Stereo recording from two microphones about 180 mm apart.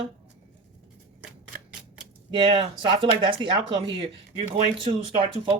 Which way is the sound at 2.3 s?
25° right (ahead or behind).